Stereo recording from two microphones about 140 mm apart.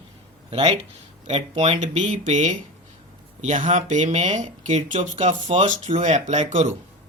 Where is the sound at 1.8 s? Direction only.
50° right (ahead or behind).